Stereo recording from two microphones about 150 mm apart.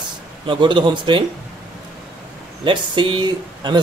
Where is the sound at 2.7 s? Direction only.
30° right (ahead or behind).